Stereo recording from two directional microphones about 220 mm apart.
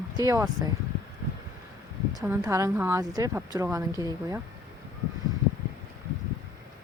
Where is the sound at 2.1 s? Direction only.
15° right (ahead or behind).